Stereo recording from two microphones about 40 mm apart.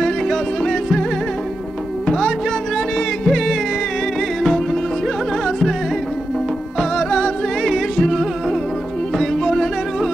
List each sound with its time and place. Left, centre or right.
0.6 s music: centre
2.0 s music: centre
7.0 s music: centre
7.6 s music: centre